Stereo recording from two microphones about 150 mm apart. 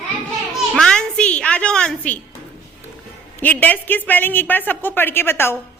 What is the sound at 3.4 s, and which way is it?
A woman's voice, 10° left (ahead or behind).